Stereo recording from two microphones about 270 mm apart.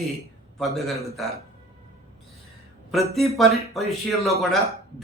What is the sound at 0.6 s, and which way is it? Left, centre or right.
Speech, centre.